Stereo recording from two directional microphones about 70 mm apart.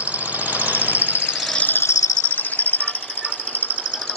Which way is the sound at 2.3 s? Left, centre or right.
Left.